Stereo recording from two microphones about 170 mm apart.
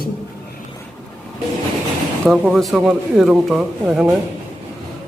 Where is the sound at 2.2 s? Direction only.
5° right (ahead or behind).